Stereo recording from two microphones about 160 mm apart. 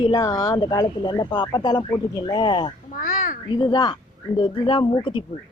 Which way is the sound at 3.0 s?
60° left (ahead or behind).